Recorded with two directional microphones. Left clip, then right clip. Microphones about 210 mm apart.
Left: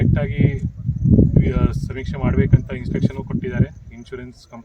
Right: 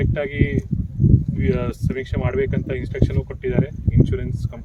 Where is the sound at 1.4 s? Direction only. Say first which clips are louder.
Even; centre (ahead or behind).